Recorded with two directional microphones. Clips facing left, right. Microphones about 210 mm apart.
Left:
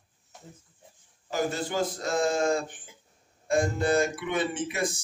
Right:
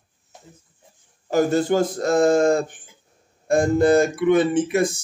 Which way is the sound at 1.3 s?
45° right (ahead or behind).